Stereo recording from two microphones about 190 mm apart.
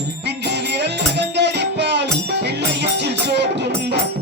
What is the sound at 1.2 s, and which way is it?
Music, 65° right (ahead or behind).